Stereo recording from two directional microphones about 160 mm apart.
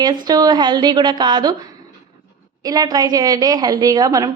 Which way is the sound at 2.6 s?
25° right (ahead or behind).